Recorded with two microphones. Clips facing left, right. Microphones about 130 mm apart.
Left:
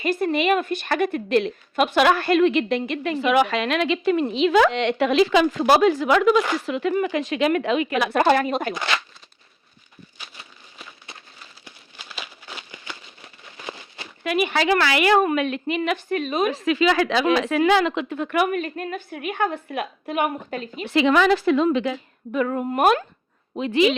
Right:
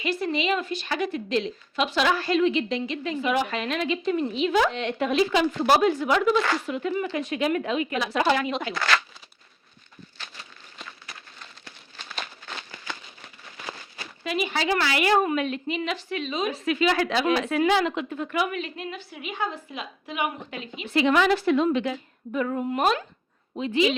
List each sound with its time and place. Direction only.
0.0 s a woman's voice: 50° left (ahead or behind)
8.7 s speech: 25° left (ahead or behind)
10.2 s a sound: 15° left (ahead or behind)
11.3 s a sound: 10° left (ahead or behind); by 14.1 s 25° left (ahead or behind)
14.3 s a woman's voice: 65° left (ahead or behind)
16.5 s a woman's voice: 90° left; by 20.8 s 45° left (ahead or behind)
20.8 s speech: 90° left
22.3 s a woman's voice: 75° left (ahead or behind)
22.7 s speech: 55° left (ahead or behind)
23.6 s a woman's voice: 65° left (ahead or behind)